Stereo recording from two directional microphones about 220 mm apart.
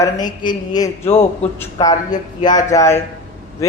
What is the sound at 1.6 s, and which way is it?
A man's voice, 15° left (ahead or behind).